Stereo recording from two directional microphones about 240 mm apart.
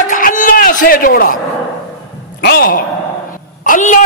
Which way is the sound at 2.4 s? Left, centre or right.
Left.